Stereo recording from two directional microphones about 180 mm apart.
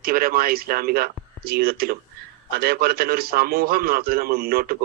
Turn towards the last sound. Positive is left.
turn(degrees=-55)  # may be behind; listen again after turning